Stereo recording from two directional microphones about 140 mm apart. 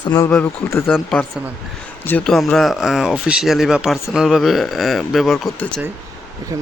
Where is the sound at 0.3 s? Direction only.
15° left (ahead or behind); by 5.5 s centre (ahead or behind).